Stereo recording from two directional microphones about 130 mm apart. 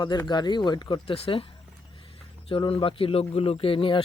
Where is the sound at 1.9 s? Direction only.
45° left (ahead or behind).